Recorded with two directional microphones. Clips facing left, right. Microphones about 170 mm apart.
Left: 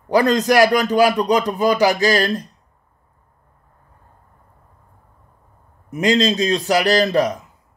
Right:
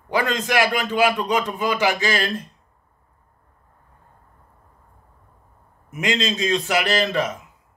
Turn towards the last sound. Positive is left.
turn(degrees=35)  # may be behind; listen again after turning